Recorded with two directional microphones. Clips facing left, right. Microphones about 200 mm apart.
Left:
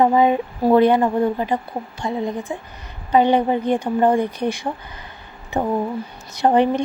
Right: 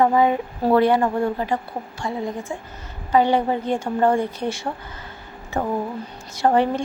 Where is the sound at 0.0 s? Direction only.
20° left (ahead or behind).